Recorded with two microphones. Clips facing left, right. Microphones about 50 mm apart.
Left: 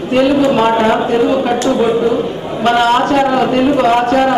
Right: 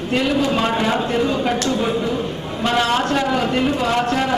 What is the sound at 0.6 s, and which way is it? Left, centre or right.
A man's voice, left.